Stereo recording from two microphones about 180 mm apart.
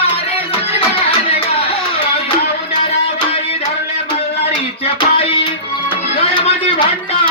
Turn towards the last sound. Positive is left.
turn(degrees=25)  # may be behind; listen again after turning